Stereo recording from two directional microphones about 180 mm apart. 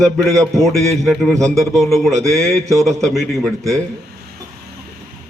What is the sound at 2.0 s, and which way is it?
Speech, 15° right (ahead or behind).